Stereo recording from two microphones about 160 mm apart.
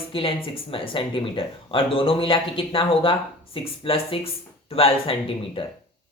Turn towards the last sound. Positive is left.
turn(degrees=35)  # may be behind; listen again after turning